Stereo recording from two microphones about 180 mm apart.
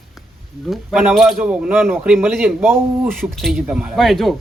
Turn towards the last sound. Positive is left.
turn(degrees=0)  # may be behind; listen again after turning